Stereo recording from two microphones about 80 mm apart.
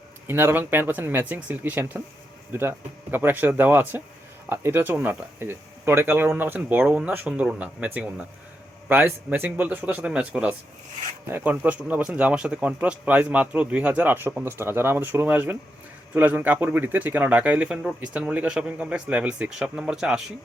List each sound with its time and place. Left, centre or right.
0.3 s speech: right; by 10.5 s centre
11.3 s speech: right; by 20.2 s centre